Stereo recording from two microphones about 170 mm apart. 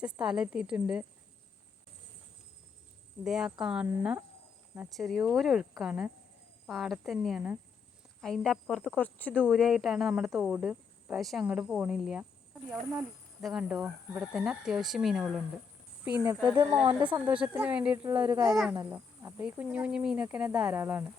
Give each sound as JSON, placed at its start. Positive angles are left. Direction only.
{"t": 0.0, "sound": "speech", "side_deg": -5}
{"t": 3.2, "sound": "speech", "side_deg": -5}
{"t": 13.4, "sound": "speech", "side_deg": -5}
{"t": 16.7, "sound": "speech", "side_deg": -30}
{"t": 17.0, "sound": "speech", "side_deg": -10}